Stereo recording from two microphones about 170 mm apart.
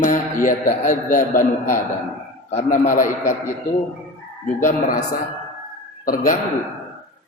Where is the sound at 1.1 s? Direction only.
50° left (ahead or behind).